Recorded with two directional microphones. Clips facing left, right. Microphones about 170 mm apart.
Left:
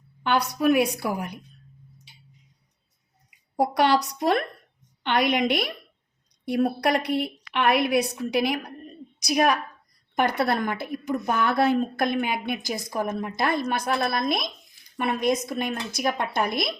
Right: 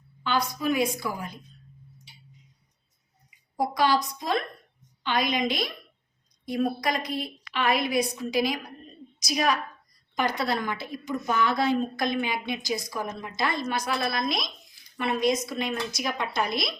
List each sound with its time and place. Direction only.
0.2 s a woman's voice: 70° left (ahead or behind)
3.6 s a woman's voice: 70° left (ahead or behind); by 16.7 s 55° left (ahead or behind)